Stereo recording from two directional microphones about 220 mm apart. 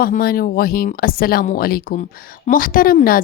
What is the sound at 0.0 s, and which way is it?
A woman's voice, 40° left (ahead or behind).